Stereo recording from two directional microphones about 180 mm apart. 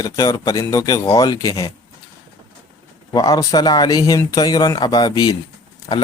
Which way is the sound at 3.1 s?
20° left (ahead or behind).